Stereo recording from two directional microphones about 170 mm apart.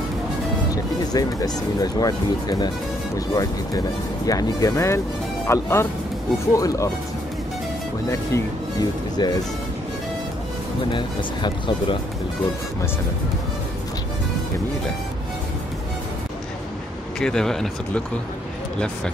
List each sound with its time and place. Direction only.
1.1 s speech: 20° left (ahead or behind)
9.1 s speech: 25° left (ahead or behind)
10.9 s speech: 30° left (ahead or behind)
17.2 s speech: 5° left (ahead or behind)